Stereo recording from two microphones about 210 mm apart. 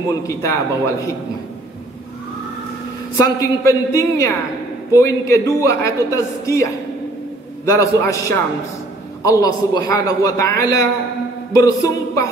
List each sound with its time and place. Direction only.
0.1 s a woman's voice: 15° left (ahead or behind)
3.2 s a woman's voice: 15° left (ahead or behind)
9.2 s a woman's voice: 15° left (ahead or behind)